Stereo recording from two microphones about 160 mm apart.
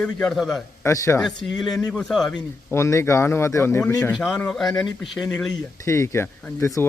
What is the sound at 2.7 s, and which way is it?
Speech, 15° left (ahead or behind).